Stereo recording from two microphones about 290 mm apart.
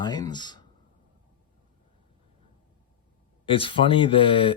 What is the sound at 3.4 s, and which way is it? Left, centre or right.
Speech, centre.